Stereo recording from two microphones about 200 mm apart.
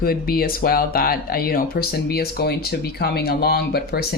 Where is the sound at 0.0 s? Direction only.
50° left (ahead or behind).